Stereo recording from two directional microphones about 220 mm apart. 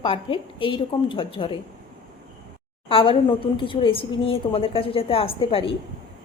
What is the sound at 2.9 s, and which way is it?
A woman's voice, 25° left (ahead or behind).